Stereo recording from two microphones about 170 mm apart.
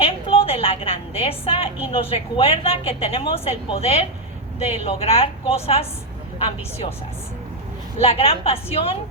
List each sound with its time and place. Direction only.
0.0 s a woman's voice: 35° left (ahead or behind)
8.0 s a woman's voice: 35° left (ahead or behind)